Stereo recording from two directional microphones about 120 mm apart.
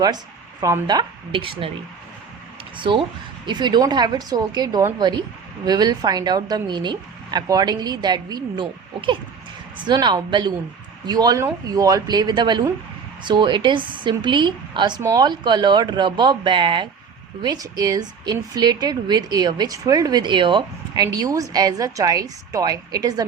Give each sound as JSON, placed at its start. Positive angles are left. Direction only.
{"t": 0.6, "sound": "speech", "side_deg": -35}
{"t": 2.7, "sound": "a woman's voice", "side_deg": -45}